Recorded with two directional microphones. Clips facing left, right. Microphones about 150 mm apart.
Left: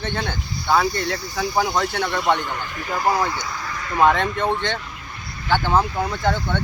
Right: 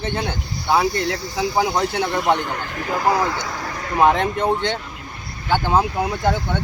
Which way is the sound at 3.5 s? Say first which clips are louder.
Right 2 dB; 55° right (ahead or behind).